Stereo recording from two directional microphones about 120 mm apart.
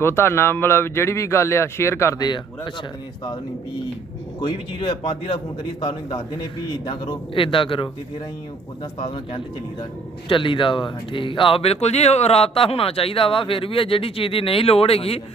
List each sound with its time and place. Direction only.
0.0 s speech: 20° left (ahead or behind)
2.2 s speech: 40° left (ahead or behind)
4.4 s speech: 40° left (ahead or behind)